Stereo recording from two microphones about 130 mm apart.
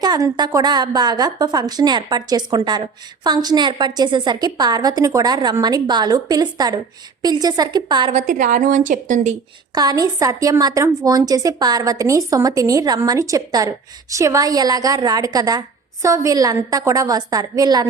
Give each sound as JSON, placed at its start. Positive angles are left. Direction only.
{"t": 0.0, "sound": "a woman's voice", "side_deg": -30}
{"t": 8.1, "sound": "a woman's voice", "side_deg": -90}
{"t": 9.7, "sound": "a woman's voice", "side_deg": -30}